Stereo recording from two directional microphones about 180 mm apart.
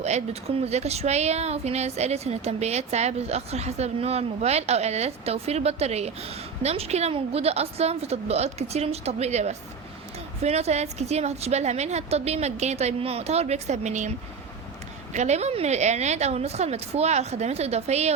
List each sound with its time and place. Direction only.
0.0 s speech: 35° right (ahead or behind)
15.1 s speech: 40° right (ahead or behind)